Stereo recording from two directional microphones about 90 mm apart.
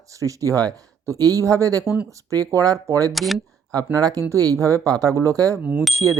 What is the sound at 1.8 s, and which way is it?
Speech, 15° right (ahead or behind).